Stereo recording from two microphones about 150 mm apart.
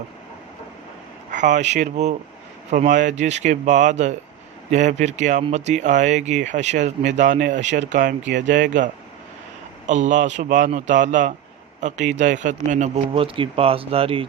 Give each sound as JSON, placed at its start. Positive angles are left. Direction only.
{"t": 1.3, "sound": "a man's voice", "side_deg": -60}
{"t": 13.1, "sound": "speech", "side_deg": -35}